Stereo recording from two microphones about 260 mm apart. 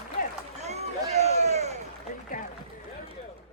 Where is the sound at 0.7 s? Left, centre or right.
Right.